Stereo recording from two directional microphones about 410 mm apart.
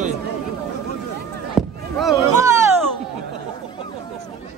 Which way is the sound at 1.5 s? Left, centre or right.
Centre.